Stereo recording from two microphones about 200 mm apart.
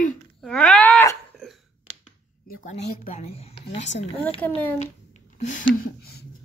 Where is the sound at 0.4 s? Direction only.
5° left (ahead or behind).